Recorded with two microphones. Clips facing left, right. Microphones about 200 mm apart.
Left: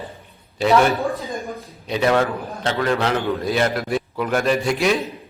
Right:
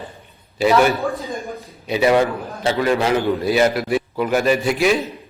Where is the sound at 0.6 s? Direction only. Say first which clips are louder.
Right 1 dB; 5° right (ahead or behind).